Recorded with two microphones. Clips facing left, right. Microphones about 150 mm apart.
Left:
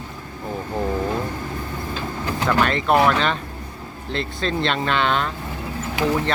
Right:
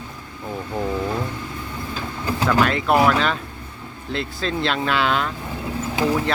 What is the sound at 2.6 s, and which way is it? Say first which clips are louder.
Speech: even; 5° right (ahead or behind).